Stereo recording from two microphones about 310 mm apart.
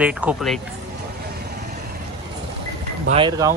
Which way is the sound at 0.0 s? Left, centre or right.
Centre.